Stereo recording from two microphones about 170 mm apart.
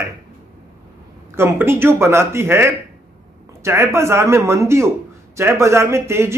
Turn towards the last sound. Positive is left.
turn(degrees=-15)  # may be behind; listen again after turning